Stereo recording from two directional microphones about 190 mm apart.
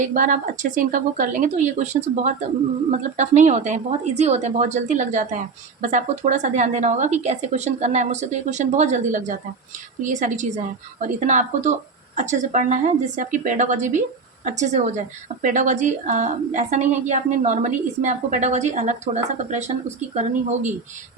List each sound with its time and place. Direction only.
0.0 s a woman's voice: 45° right (ahead or behind)